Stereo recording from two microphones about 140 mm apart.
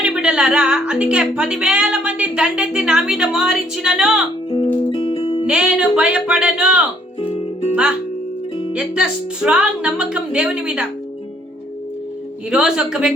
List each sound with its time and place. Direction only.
0.0 s speech: 5° right (ahead or behind)
4.9 s music: 50° left (ahead or behind)
5.5 s speech: 5° right (ahead or behind)
7.2 s music: 45° left (ahead or behind)
8.7 s speech: 5° right (ahead or behind)
12.5 s speech: 5° right (ahead or behind)